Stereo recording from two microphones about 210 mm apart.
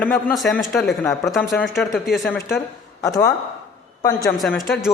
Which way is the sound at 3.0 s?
15° left (ahead or behind).